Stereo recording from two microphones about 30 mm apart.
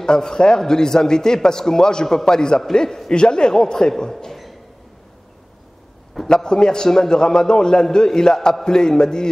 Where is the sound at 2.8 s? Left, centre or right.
Centre.